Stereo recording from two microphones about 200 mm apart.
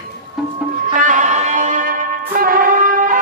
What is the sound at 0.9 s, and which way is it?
Music, 40° right (ahead or behind).